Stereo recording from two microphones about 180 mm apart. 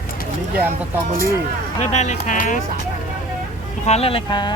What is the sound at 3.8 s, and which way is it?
Speech, 35° left (ahead or behind).